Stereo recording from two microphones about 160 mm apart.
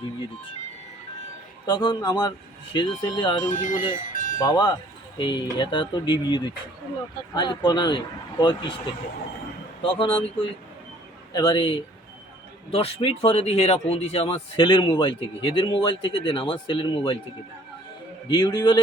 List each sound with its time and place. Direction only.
1.6 s speech: 25° left (ahead or behind)
3.5 s speech: 55° left (ahead or behind)
4.1 s music: 55° left (ahead or behind)
4.4 s speech: 25° left (ahead or behind)
9.8 s speech: 35° left (ahead or behind)
18.3 s speech: 30° left (ahead or behind)